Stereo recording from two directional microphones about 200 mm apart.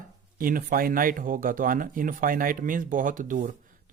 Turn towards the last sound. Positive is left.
turn(degrees=-40)  # may be behind; listen again after turning